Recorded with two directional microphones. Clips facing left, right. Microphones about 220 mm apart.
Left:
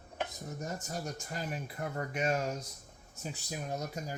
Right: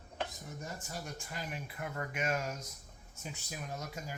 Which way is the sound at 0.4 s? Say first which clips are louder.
Left 5 dB; 40° left (ahead or behind).